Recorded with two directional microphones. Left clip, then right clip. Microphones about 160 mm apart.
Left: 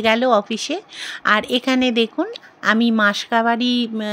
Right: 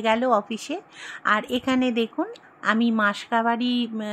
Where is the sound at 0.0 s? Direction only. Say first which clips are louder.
Left 5 dB; 40° left (ahead or behind).